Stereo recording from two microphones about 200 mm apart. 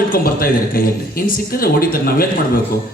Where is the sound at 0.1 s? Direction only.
45° left (ahead or behind).